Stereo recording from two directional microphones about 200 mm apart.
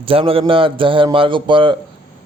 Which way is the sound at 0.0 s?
25° right (ahead or behind).